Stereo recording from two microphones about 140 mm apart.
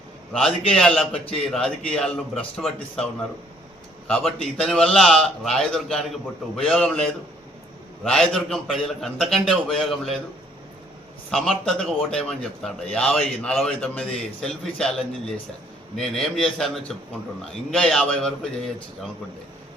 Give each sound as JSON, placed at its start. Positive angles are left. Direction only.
{"t": 0.3, "sound": "a man's voice", "side_deg": 5}
{"t": 1.1, "sound": "a man's voice", "side_deg": 45}
{"t": 1.5, "sound": "a man's voice", "side_deg": 5}
{"t": 11.3, "sound": "a man's voice", "side_deg": 5}